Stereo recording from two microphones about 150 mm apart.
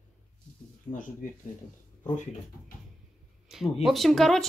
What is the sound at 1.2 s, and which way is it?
Speech, 60° left (ahead or behind).